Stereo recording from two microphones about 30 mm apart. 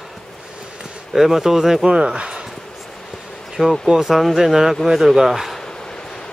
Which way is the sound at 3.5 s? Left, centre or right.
Centre.